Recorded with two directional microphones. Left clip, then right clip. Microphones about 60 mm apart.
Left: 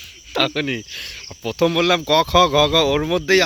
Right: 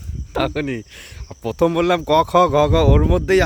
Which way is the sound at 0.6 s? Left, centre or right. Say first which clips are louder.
Left 2 dB; right.